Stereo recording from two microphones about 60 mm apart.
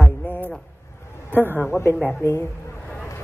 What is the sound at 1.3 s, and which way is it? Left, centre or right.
Speech, right.